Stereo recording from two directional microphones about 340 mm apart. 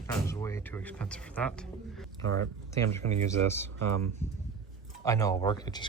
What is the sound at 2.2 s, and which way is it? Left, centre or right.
Speech, right.